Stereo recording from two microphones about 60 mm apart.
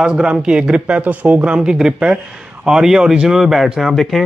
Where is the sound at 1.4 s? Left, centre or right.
Centre.